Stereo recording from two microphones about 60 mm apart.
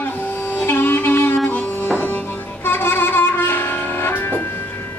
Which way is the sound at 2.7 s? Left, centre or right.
Left.